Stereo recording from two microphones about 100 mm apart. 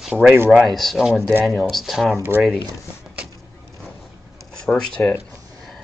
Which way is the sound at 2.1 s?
20° right (ahead or behind).